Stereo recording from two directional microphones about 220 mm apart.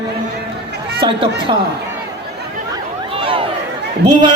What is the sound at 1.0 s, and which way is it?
Speech, 20° right (ahead or behind).